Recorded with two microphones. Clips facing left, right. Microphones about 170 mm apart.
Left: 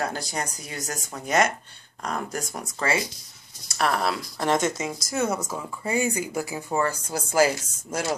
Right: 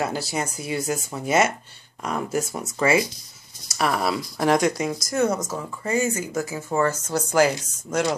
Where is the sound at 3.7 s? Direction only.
5° right (ahead or behind).